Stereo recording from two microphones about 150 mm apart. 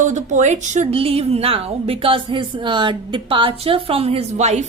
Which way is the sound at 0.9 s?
40° right (ahead or behind).